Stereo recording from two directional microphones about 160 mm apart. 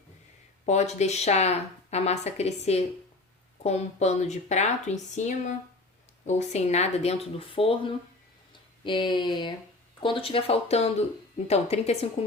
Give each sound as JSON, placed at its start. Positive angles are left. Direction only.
{"t": 0.6, "sound": "speech", "side_deg": 45}